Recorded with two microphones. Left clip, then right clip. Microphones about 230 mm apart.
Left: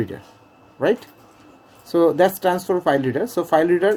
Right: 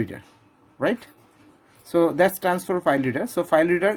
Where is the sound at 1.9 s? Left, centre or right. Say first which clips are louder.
Left 3 dB; right.